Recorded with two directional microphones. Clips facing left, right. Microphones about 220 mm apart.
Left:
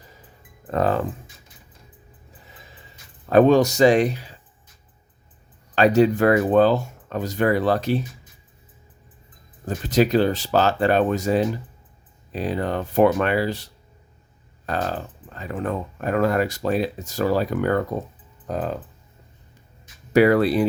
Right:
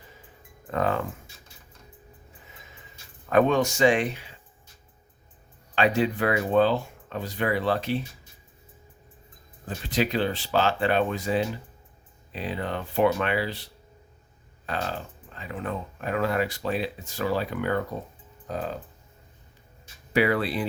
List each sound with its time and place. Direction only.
0.7 s speech: 35° left (ahead or behind)
3.2 s speech: 35° left (ahead or behind)
5.7 s speech: 40° left (ahead or behind)
9.6 s speech: 45° left (ahead or behind)
14.7 s speech: 45° left (ahead or behind)
20.1 s speech: 45° left (ahead or behind)